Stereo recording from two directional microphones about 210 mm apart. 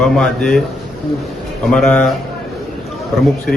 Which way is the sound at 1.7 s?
5° left (ahead or behind).